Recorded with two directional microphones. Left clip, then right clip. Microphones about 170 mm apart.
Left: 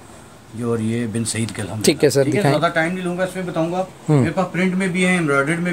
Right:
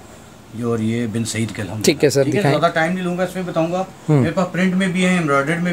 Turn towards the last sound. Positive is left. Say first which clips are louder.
# right 1 dB
turn(degrees=0)  # may be behind; listen again after turning